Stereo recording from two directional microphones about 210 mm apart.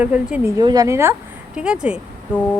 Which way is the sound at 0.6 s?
20° right (ahead or behind).